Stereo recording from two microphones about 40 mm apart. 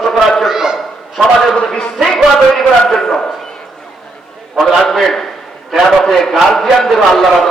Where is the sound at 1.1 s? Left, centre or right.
Centre.